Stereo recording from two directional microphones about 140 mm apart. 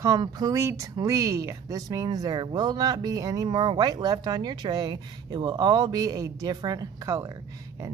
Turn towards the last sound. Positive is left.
turn(degrees=-25)  # may be behind; listen again after turning